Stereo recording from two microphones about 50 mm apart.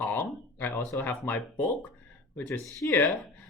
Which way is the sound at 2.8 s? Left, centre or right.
Left.